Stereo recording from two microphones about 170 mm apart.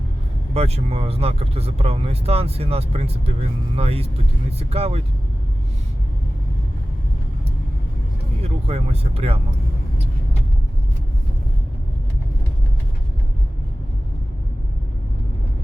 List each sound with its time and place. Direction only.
0.5 s speech: 35° right (ahead or behind)
8.4 s speech: 40° right (ahead or behind)